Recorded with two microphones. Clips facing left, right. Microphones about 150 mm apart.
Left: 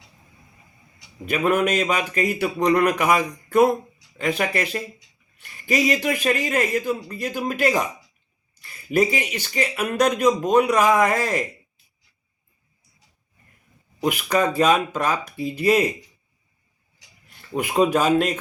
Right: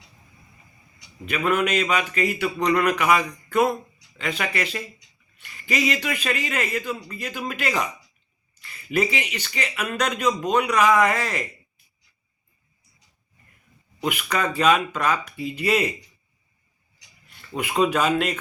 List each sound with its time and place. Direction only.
1.2 s speech: 40° left (ahead or behind)
14.0 s speech: 40° left (ahead or behind)
17.6 s speech: 40° left (ahead or behind)